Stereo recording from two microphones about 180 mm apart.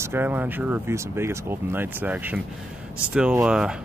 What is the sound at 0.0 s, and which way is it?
Speech, 10° right (ahead or behind).